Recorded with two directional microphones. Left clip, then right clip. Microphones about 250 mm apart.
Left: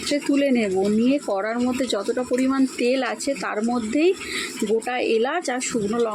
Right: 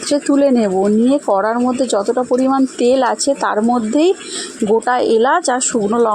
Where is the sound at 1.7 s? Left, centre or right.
Centre.